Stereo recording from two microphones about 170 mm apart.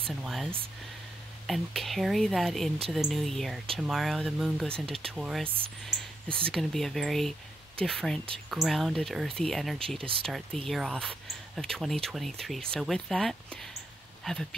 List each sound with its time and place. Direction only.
0.1 s speech: centre (ahead or behind)
1.5 s speech: centre (ahead or behind)
9.9 s speech: 30° right (ahead or behind)
10.2 s speech: 5° left (ahead or behind)